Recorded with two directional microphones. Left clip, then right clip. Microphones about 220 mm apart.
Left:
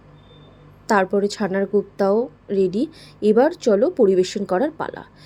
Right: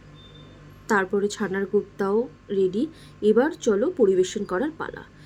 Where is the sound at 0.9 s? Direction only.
15° left (ahead or behind).